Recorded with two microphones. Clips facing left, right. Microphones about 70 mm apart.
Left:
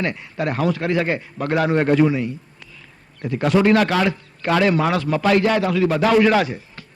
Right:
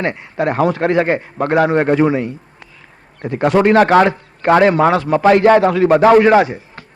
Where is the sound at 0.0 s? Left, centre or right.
Right.